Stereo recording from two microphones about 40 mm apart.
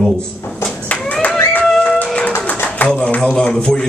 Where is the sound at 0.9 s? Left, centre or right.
Left.